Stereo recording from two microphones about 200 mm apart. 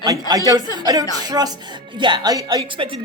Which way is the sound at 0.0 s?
20° right (ahead or behind).